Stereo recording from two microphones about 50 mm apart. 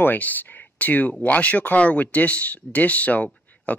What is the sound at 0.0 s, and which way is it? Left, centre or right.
Speech, left.